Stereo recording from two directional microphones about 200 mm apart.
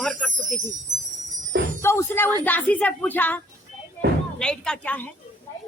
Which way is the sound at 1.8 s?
10° left (ahead or behind).